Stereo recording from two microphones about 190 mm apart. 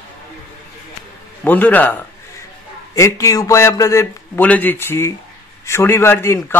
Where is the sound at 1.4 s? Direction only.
10° left (ahead or behind).